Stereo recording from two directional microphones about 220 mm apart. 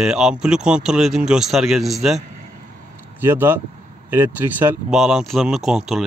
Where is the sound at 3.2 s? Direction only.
10° right (ahead or behind).